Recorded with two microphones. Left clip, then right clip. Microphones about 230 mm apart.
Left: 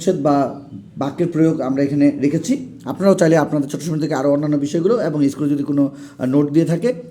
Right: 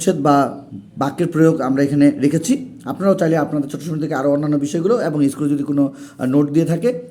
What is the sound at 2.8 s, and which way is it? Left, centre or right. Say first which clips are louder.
Speech: left 2 dB; centre.